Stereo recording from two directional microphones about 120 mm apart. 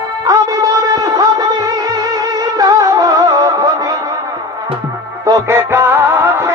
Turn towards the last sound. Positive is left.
turn(degrees=-20)  # may be behind; listen again after turning